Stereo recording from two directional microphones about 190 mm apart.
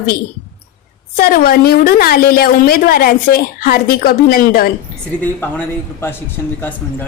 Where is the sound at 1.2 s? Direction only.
50° left (ahead or behind).